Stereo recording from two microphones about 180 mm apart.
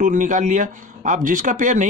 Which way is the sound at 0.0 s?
45° right (ahead or behind).